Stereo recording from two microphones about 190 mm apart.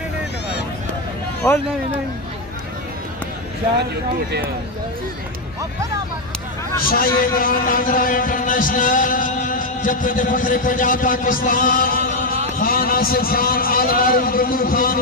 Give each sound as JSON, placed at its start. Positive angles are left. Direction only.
{"t": 6.9, "sound": "a man's voice", "side_deg": 50}